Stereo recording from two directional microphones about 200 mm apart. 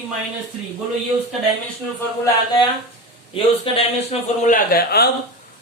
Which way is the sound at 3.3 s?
30° left (ahead or behind).